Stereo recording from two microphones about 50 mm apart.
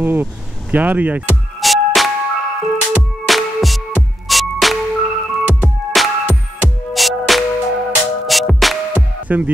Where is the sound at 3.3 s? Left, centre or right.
Centre.